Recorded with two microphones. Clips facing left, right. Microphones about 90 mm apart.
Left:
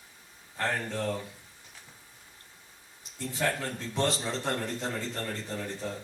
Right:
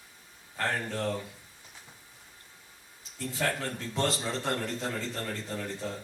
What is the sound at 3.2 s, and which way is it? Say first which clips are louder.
Speech: left 1 dB; 20° left (ahead or behind).